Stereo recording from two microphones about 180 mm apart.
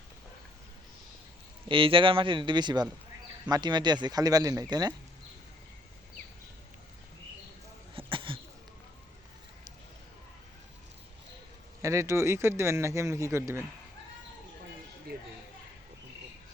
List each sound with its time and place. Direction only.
1.6 s speech: 30° right (ahead or behind)
7.9 s a sound: 30° right (ahead or behind)
11.8 s speech: 15° right (ahead or behind)